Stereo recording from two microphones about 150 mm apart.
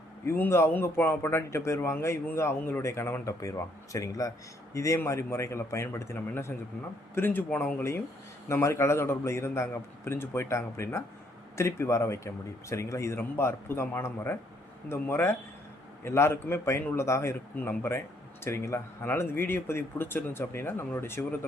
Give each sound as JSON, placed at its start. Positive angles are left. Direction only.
{"t": 0.3, "sound": "a man's voice", "side_deg": 15}